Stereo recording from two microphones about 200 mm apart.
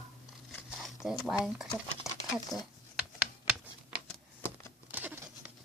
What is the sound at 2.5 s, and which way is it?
Speech, 20° left (ahead or behind).